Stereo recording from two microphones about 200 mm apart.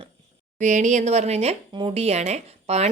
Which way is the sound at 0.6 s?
35° right (ahead or behind).